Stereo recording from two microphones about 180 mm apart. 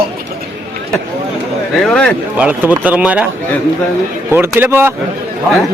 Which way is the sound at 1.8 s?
5° left (ahead or behind).